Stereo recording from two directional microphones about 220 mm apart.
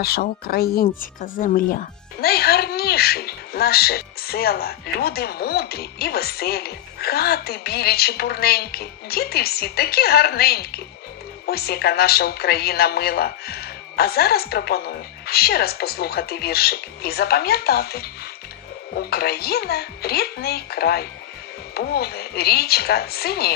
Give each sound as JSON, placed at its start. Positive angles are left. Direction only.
{"t": 0.0, "sound": "speech", "side_deg": 45}